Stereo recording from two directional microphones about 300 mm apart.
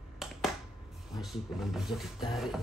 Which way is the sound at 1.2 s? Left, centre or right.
Centre.